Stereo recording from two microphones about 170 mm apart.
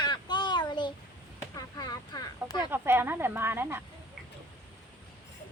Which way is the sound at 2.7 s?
10° right (ahead or behind).